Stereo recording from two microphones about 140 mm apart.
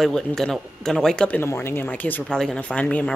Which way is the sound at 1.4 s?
15° left (ahead or behind).